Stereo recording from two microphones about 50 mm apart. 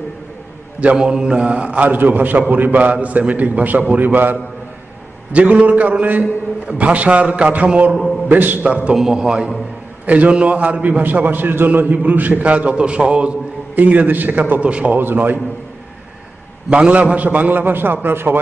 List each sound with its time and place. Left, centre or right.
0.9 s a man's voice: centre
1.9 s a man's voice: right
5.3 s a man's voice: right
8.3 s a man's voice: right
8.6 s a man's voice: right
8.9 s a man's voice: centre
10.0 s a man's voice: right
13.7 s a man's voice: right
15.0 s a man's voice: right
16.9 s a man's voice: right